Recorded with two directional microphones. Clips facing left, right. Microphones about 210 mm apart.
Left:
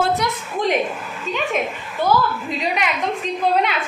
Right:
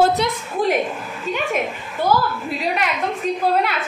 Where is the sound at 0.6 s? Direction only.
5° right (ahead or behind).